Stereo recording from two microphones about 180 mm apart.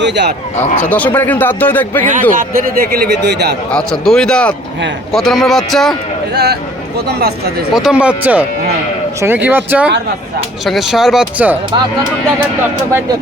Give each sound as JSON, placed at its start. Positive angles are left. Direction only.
{"t": 0.0, "sound": "speech", "side_deg": -70}
{"t": 0.8, "sound": "speech", "side_deg": 10}
{"t": 2.3, "sound": "speech", "side_deg": -50}
{"t": 3.7, "sound": "speech", "side_deg": 5}
{"t": 6.3, "sound": "speech", "side_deg": -65}
{"t": 7.7, "sound": "speech", "side_deg": -5}